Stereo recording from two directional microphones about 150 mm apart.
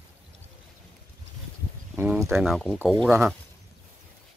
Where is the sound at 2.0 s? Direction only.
15° right (ahead or behind).